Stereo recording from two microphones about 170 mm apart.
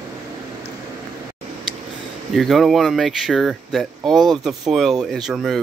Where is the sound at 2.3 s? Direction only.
Centre (ahead or behind).